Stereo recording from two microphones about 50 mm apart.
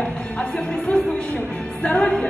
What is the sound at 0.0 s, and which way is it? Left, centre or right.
Music, left.